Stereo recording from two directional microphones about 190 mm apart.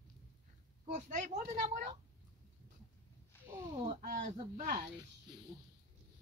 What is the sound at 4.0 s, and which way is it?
Speech, 40° right (ahead or behind).